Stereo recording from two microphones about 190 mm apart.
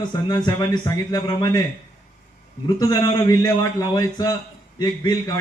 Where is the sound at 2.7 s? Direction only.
20° left (ahead or behind).